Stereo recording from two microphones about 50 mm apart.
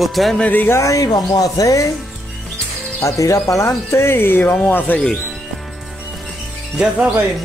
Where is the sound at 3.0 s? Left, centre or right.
Left.